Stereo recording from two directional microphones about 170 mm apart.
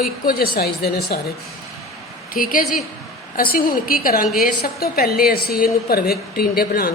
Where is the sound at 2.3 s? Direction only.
55° left (ahead or behind).